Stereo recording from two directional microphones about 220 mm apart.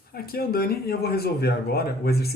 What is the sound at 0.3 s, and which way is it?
Speech, 45° left (ahead or behind).